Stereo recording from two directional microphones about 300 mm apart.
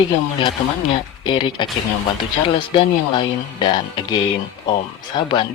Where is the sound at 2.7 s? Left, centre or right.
Centre.